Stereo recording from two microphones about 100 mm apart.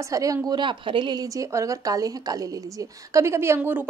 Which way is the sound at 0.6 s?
55° right (ahead or behind).